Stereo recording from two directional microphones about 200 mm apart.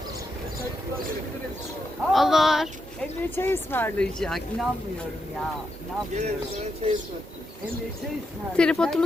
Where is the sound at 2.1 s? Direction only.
Centre (ahead or behind).